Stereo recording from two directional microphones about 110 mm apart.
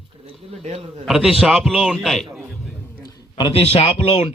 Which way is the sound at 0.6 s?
75° right (ahead or behind).